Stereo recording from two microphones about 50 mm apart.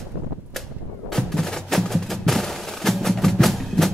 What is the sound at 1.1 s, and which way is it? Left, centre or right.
Music, centre.